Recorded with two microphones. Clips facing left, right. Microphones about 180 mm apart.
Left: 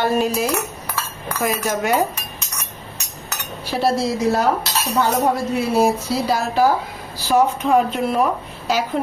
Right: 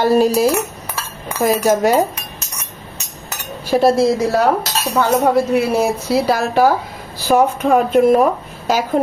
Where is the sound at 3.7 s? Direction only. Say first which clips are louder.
Right 8 dB; 45° right (ahead or behind).